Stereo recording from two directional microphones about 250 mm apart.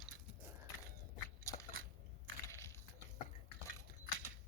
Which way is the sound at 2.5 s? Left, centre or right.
Centre.